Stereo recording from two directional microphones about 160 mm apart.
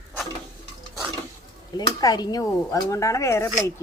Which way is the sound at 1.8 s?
25° left (ahead or behind).